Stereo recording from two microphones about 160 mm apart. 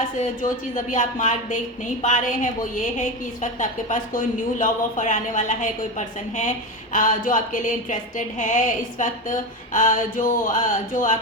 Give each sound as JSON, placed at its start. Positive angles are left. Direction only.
{"t": 0.9, "sound": "speech", "side_deg": 50}